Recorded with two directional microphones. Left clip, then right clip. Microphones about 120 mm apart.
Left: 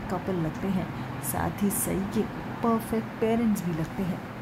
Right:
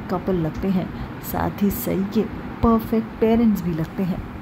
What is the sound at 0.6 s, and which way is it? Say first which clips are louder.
A woman's voice: right 6 dB; 40° right (ahead or behind).